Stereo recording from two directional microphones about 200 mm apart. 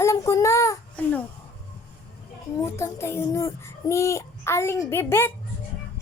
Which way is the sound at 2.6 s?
15° left (ahead or behind).